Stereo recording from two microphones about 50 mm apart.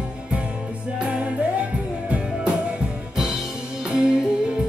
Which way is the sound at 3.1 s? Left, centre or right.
Centre.